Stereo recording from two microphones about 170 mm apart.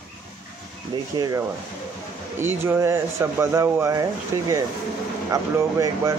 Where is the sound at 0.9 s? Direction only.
25° right (ahead or behind).